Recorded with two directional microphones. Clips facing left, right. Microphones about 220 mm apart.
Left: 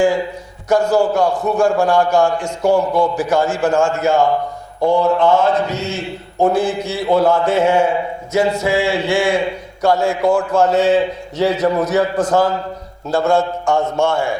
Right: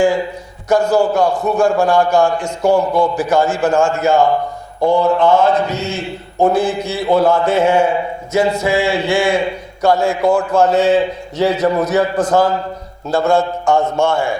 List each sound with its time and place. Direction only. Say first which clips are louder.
0.0 s a man's voice: right 1 dB; 15° right (ahead or behind)
2.6 s a man's voice: right 1 dB; 35° right (ahead or behind)
3.2 s a man's voice: right 1 dB; 20° right (ahead or behind)
7.1 s speech: right 1 dB; 25° right (ahead or behind)
10.2 s a man's voice: right 1 dB; 30° right (ahead or behind)